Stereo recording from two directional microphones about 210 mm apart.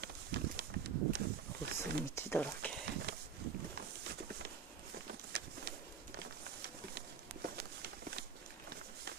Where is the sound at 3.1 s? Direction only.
50° right (ahead or behind).